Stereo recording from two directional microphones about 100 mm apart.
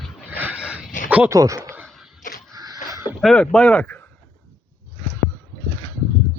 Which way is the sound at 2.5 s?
40° right (ahead or behind).